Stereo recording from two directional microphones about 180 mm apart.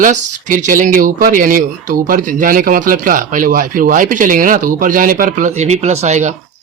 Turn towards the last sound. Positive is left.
turn(degrees=-40)  # may be behind; listen again after turning